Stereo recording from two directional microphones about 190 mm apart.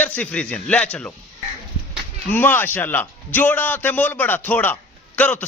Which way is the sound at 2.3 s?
10° left (ahead or behind).